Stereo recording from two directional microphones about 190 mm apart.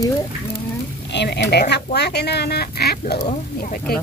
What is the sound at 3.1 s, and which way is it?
Speech, 40° left (ahead or behind).